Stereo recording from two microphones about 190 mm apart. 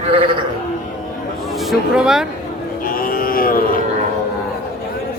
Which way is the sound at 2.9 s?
50° left (ahead or behind).